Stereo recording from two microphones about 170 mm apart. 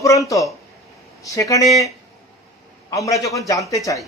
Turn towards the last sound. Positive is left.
turn(degrees=20)  # may be behind; listen again after turning